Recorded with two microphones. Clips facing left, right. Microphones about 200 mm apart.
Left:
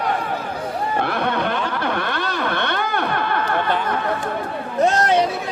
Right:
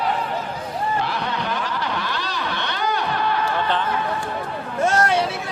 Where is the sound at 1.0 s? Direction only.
55° left (ahead or behind).